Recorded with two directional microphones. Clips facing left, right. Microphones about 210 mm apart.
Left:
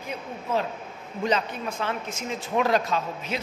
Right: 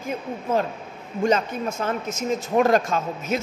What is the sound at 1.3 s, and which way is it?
A woman's voice, 45° right (ahead or behind).